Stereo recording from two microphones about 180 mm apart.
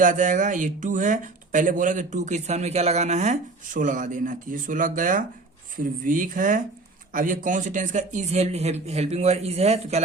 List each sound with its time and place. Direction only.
0.0 s speech: 45° right (ahead or behind)